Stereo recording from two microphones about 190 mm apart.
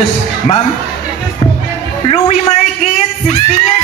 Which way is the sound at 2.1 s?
35° left (ahead or behind).